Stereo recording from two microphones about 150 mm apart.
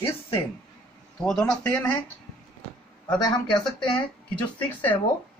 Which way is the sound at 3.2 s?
30° left (ahead or behind).